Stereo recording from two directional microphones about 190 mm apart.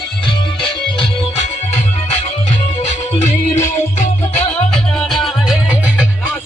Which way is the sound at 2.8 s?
40° left (ahead or behind).